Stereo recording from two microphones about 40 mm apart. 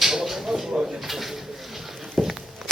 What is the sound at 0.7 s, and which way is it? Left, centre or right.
Drawer open or close, centre.